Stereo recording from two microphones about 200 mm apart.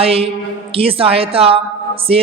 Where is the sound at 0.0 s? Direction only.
30° right (ahead or behind).